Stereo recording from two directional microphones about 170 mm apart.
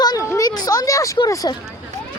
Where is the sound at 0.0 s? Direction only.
20° left (ahead or behind).